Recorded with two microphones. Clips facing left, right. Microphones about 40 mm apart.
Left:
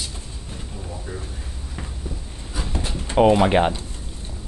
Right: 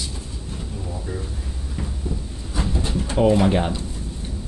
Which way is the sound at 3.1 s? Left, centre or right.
Left.